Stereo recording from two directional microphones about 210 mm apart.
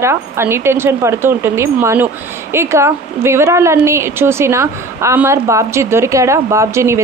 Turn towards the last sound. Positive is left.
turn(degrees=-15)  # may be behind; listen again after turning